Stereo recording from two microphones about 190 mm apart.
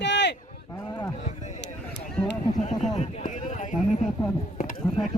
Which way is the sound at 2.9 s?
35° left (ahead or behind).